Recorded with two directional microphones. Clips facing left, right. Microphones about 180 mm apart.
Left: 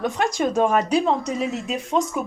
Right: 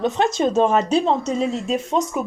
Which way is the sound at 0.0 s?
25° right (ahead or behind).